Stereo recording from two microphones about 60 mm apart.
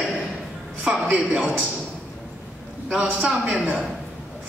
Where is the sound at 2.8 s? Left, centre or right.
Centre.